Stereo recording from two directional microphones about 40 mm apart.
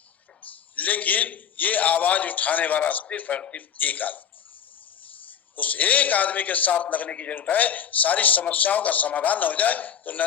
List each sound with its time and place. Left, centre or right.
0.4 s a man's voice: left
5.5 s a man's voice: left